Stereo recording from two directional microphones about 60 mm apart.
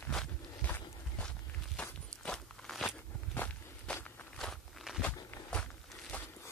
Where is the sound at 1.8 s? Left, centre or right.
Centre.